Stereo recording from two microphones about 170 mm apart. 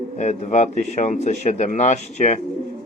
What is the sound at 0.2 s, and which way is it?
A man's voice, 45° left (ahead or behind).